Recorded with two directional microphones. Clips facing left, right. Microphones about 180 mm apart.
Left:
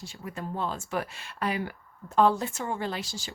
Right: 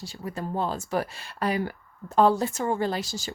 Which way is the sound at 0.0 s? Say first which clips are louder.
Right 4 dB; 35° right (ahead or behind).